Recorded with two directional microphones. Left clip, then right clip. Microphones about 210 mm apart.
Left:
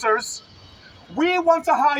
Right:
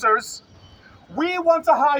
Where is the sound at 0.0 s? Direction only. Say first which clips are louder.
Right 2 dB; 10° right (ahead or behind).